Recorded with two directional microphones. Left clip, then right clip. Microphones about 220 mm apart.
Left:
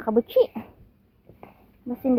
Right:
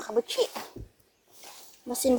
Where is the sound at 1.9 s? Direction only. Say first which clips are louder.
Left 1 dB; 40° right (ahead or behind).